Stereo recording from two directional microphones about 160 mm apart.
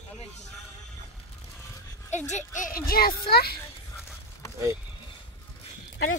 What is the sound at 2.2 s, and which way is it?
A child's voice, 50° left (ahead or behind).